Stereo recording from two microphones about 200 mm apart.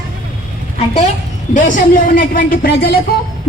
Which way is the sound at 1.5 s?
40° left (ahead or behind).